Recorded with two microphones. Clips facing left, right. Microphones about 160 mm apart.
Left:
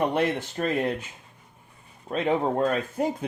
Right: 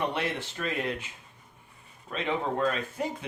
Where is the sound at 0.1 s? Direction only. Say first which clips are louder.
Left 7 dB; 45° left (ahead or behind).